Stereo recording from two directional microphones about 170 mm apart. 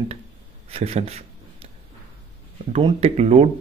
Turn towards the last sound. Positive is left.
turn(degrees=-40)  # may be behind; listen again after turning